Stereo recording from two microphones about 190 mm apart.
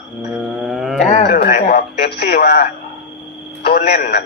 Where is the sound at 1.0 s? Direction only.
45° left (ahead or behind).